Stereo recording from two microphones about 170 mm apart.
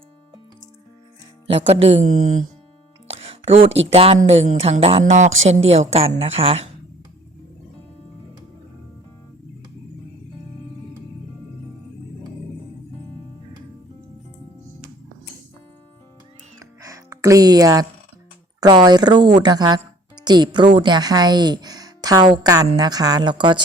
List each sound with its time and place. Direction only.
1.6 s speech: 40° right (ahead or behind)
3.1 s music: 35° right (ahead or behind)
3.8 s a woman's voice: 35° right (ahead or behind)
16.6 s music: 20° right (ahead or behind)
18.6 s a woman's voice: 25° right (ahead or behind)